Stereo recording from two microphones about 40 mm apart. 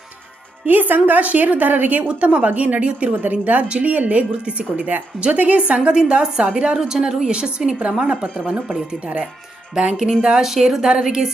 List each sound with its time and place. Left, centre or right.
0.6 s speech: right
2.0 s a woman's voice: right
8.4 s speech: right
9.7 s a woman's voice: centre
10.4 s a woman's voice: centre